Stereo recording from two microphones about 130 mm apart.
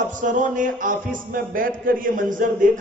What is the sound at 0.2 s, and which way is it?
A man's voice, 85° right.